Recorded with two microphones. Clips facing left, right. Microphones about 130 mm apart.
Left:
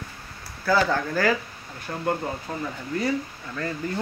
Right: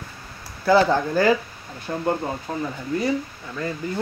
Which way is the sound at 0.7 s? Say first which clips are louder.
Right 5 dB; 25° right (ahead or behind).